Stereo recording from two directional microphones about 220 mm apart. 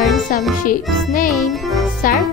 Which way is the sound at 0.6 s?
40° left (ahead or behind).